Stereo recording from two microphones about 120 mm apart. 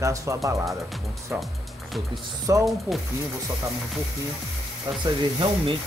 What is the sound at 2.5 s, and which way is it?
Speech, 25° right (ahead or behind).